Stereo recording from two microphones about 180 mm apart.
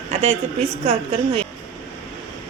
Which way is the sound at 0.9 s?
35° right (ahead or behind).